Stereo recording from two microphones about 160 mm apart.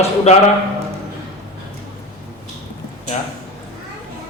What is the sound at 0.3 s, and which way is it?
Speech, 40° left (ahead or behind).